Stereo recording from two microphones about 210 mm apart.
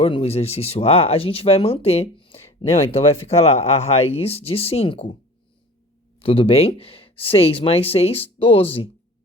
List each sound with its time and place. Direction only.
0.0 s speech: 30° left (ahead or behind)
6.1 s speech: 25° left (ahead or behind)